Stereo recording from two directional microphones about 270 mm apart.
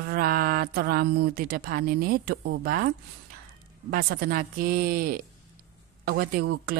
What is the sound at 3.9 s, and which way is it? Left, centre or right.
Speech, right.